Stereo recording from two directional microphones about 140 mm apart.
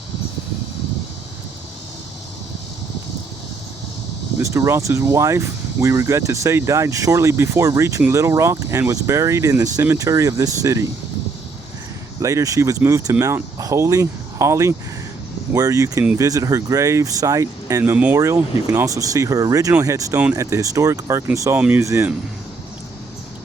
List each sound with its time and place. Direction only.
4.4 s speech: 20° right (ahead or behind)
12.2 s speech: 20° right (ahead or behind)
17.9 s speech: 10° right (ahead or behind)
18.2 s speech: 20° right (ahead or behind)